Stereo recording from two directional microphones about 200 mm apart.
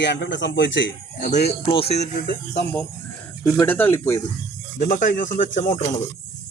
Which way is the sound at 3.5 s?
10° left (ahead or behind).